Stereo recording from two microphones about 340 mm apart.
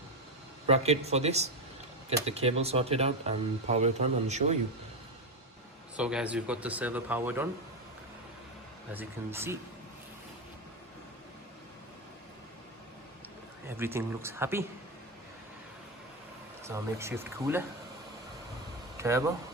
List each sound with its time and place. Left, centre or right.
0.7 s speech: centre
6.0 s speech: centre
8.9 s speech: centre
13.7 s speech: centre
16.6 s speech: centre
18.9 s speech: centre